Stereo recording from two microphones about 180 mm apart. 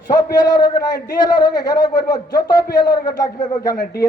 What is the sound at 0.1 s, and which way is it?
A man's voice, 20° left (ahead or behind).